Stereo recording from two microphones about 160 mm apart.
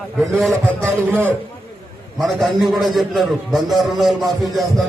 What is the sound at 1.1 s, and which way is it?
Speech, 15° right (ahead or behind).